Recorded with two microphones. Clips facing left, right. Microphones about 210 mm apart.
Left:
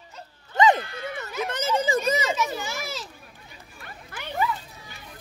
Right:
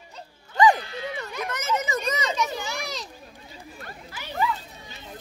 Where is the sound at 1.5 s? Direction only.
30° left (ahead or behind).